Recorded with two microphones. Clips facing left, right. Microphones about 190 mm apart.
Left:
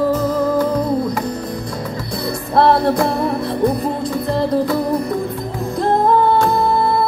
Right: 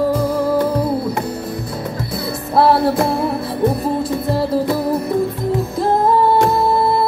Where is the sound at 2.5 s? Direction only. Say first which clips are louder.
Even; 5° right (ahead or behind).